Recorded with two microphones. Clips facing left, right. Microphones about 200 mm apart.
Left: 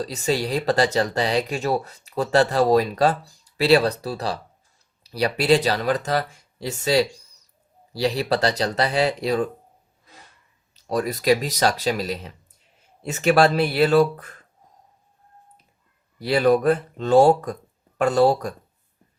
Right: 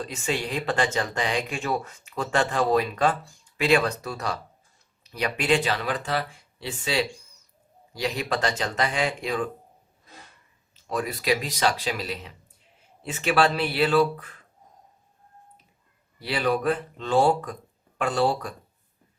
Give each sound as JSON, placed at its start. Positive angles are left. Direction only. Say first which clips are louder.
{"t": 0.0, "sound": "speech", "louder": "left 5 dB", "side_deg": 35}
{"t": 10.8, "sound": "speech", "louder": "left 5 dB", "side_deg": 40}
{"t": 16.2, "sound": "speech", "louder": "left 7 dB", "side_deg": 40}